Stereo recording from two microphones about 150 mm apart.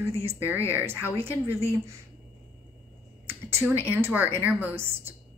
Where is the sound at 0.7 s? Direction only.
15° right (ahead or behind).